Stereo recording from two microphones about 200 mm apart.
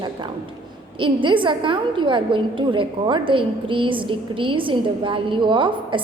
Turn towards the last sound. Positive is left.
turn(degrees=-25)  # may be behind; listen again after turning